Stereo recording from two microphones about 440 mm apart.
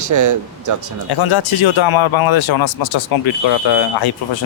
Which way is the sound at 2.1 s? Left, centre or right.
Left.